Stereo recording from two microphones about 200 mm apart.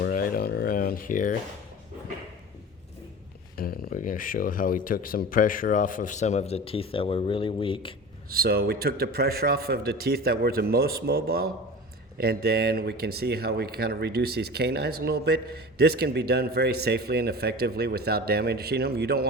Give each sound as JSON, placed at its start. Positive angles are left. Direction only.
{"t": 0.0, "sound": "a sound", "side_deg": 45}
{"t": 3.6, "sound": "speech", "side_deg": 45}
{"t": 8.3, "sound": "speech", "side_deg": -50}